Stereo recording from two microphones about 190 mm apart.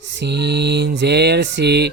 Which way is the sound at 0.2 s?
60° right (ahead or behind).